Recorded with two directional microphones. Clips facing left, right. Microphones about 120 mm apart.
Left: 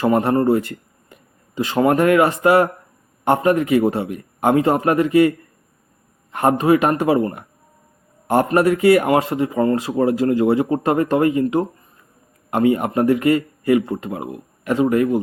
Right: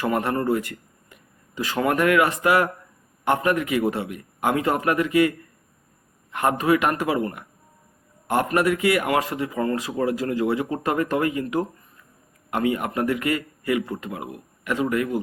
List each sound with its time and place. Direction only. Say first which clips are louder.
0.0 s speech: left 7 dB; 30° left (ahead or behind)
6.3 s speech: left 5 dB; 35° left (ahead or behind)